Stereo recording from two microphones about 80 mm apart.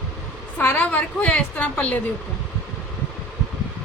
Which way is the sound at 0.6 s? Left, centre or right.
Centre.